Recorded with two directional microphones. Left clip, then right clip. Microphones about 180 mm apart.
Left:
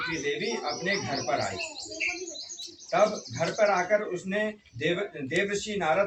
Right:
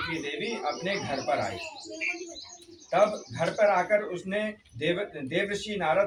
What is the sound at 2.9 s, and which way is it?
Speech, 20° right (ahead or behind).